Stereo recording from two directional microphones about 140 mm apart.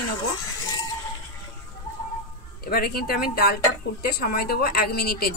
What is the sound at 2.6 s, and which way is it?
A woman's voice, 90° left.